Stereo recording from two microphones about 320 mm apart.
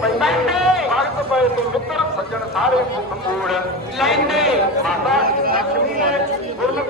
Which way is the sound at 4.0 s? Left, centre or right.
Centre.